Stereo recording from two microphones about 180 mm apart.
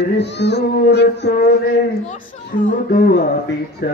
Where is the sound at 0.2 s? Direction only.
70° left (ahead or behind).